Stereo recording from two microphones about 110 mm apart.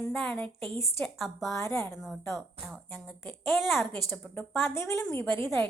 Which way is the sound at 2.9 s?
20° left (ahead or behind).